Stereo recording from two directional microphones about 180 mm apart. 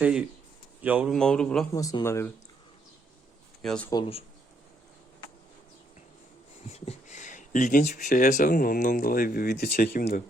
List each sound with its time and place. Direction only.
0.0 s speech: 5° right (ahead or behind)
1.7 s speech: 20° left (ahead or behind)
3.6 s speech: 5° left (ahead or behind)
6.7 s speech: 35° left (ahead or behind); by 10.2 s 60° left (ahead or behind)